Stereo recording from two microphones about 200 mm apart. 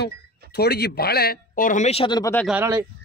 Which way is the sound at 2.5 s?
10° right (ahead or behind).